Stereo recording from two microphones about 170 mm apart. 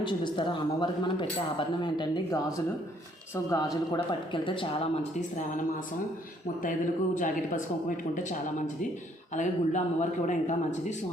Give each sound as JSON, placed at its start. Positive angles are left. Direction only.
{"t": 0.0, "sound": "a man's voice", "side_deg": 25}
{"t": 6.6, "sound": "speech", "side_deg": 50}